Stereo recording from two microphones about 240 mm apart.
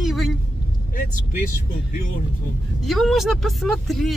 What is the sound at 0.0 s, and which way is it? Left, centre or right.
Vehicle, centre.